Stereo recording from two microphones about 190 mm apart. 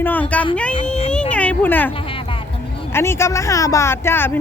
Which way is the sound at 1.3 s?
5° left (ahead or behind).